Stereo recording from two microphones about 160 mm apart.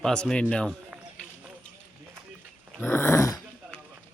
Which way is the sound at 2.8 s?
15° left (ahead or behind).